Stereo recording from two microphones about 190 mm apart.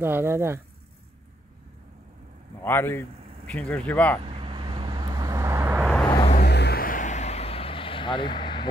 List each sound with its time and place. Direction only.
0.0 s speech: 10° right (ahead or behind)
2.6 s speech: 10° left (ahead or behind)
4.2 s vehicle: 30° right (ahead or behind); by 5.9 s 15° right (ahead or behind)
5.9 s vehicle: 5° left (ahead or behind)
6.4 s vehicle: 60° left (ahead or behind); by 8.6 s 25° left (ahead or behind)